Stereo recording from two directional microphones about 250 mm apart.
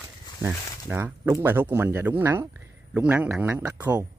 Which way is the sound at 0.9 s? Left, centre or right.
Centre.